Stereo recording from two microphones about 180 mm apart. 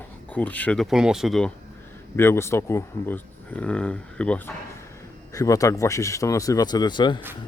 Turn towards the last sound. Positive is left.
turn(degrees=25)  # may be behind; listen again after turning